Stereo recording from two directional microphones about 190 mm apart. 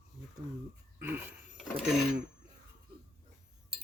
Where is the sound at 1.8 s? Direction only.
5° right (ahead or behind).